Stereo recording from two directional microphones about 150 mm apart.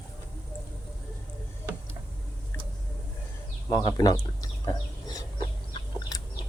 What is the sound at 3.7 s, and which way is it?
Speech, 25° left (ahead or behind).